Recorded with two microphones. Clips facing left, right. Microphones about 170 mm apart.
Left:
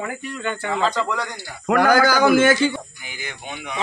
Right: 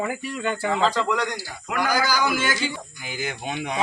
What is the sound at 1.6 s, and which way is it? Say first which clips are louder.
Speech: left 8 dB; 55° left (ahead or behind).